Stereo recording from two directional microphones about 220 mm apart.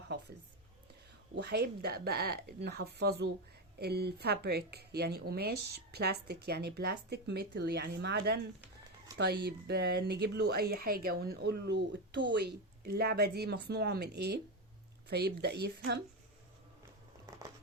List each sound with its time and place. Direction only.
1.4 s speech: 50° right (ahead or behind)